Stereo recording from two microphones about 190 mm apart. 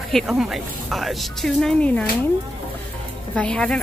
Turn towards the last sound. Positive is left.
turn(degrees=5)  # may be behind; listen again after turning